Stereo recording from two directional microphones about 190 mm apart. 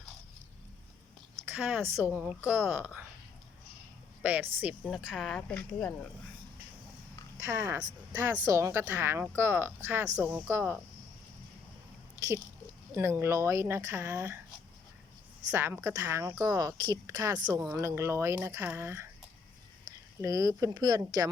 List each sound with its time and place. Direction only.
1.5 s speech: 10° right (ahead or behind)
4.2 s a woman's voice: 10° right (ahead or behind)
7.3 s speech: 15° right (ahead or behind)
13.0 s speech: 15° right (ahead or behind)
15.4 s speech: 15° right (ahead or behind)
20.2 s speech: 15° right (ahead or behind)